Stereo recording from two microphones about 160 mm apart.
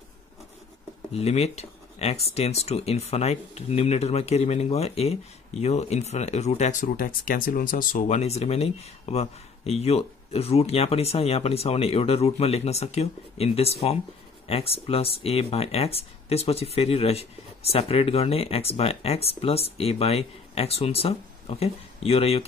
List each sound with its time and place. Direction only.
1.1 s speech: 40° left (ahead or behind)